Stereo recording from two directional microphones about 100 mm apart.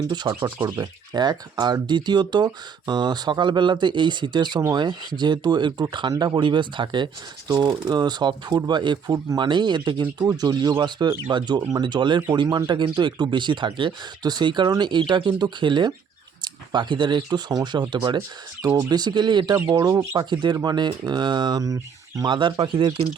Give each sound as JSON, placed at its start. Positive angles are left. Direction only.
{"t": 0.3, "sound": "speech", "side_deg": -50}
{"t": 22.2, "sound": "speech", "side_deg": -50}